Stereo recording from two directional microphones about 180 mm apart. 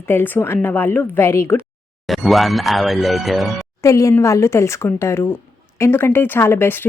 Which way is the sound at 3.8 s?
15° left (ahead or behind).